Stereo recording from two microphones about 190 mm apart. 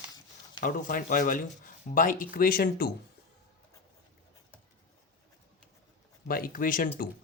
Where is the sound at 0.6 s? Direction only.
45° left (ahead or behind).